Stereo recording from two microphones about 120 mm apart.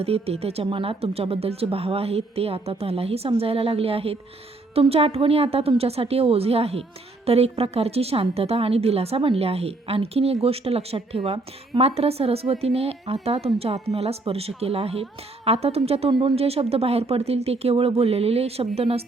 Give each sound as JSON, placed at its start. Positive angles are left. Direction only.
{"t": 0.0, "sound": "speech", "side_deg": -55}